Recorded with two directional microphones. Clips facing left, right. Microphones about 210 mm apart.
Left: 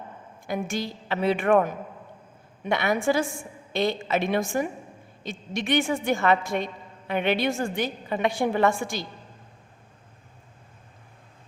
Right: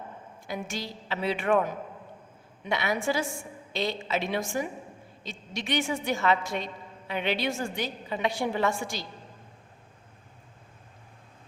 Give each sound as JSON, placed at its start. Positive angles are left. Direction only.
{"t": 0.4, "sound": "a woman's voice", "side_deg": 50}